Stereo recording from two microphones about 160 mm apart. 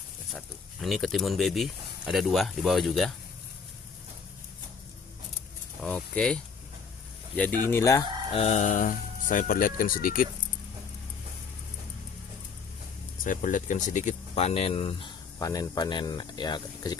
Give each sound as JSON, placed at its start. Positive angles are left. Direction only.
{"t": 0.8, "sound": "speech", "side_deg": 0}
{"t": 5.8, "sound": "speech", "side_deg": 5}
{"t": 8.3, "sound": "speech", "side_deg": 40}
{"t": 13.2, "sound": "speech", "side_deg": 55}
{"t": 15.3, "sound": "speech", "side_deg": 20}